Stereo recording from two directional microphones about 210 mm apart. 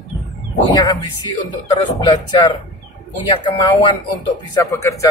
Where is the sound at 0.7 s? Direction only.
20° left (ahead or behind).